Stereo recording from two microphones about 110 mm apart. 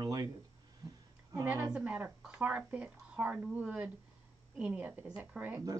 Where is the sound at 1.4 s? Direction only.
15° right (ahead or behind).